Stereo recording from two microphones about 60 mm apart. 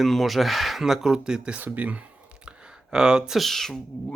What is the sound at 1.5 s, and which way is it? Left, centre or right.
Speech, right.